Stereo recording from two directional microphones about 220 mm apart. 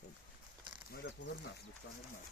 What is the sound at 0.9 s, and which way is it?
Speech, 50° left (ahead or behind).